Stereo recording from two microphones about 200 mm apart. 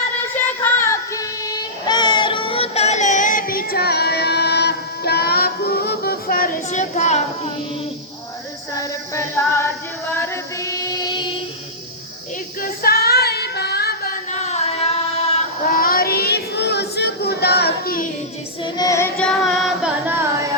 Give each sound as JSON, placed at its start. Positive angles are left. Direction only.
{"t": 0.3, "sound": "child singing", "side_deg": 10}
{"t": 8.7, "sound": "female singing", "side_deg": 15}
{"t": 12.6, "sound": "female singing", "side_deg": 50}
{"t": 15.7, "sound": "child singing", "side_deg": 45}
{"t": 18.6, "sound": "child singing", "side_deg": 15}
{"t": 19.5, "sound": "singing", "side_deg": 0}